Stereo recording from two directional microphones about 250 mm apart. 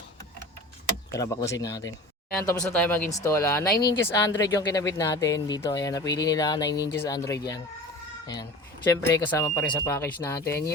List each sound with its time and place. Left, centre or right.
1.1 s speech: centre
3.8 s speech: left
4.0 s speech: centre
9.0 s speech: centre